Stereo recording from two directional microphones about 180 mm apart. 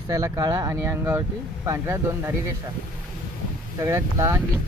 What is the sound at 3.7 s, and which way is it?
Speech, 15° right (ahead or behind).